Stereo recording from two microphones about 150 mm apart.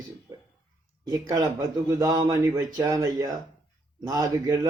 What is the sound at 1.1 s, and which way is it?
Speech, 25° right (ahead or behind).